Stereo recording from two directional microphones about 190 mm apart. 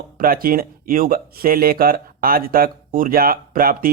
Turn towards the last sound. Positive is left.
turn(degrees=-50)  # may be behind; listen again after turning